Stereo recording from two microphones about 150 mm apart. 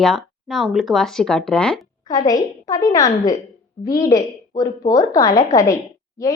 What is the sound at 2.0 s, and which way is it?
A woman's voice, 25° left (ahead or behind).